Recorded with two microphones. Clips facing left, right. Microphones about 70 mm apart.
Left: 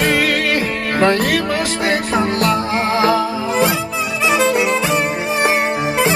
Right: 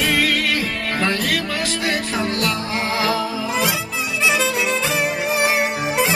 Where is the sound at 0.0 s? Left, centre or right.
Left.